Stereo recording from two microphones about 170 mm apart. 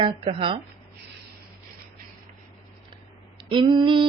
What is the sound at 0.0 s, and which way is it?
Speech, 35° right (ahead or behind).